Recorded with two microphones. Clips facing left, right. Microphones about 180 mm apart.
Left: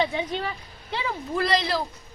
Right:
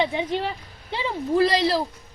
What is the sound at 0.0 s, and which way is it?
A woman's voice, 25° right (ahead or behind).